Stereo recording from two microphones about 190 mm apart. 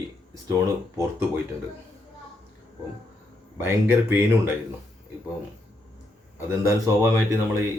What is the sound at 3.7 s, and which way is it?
Speech, 10° right (ahead or behind).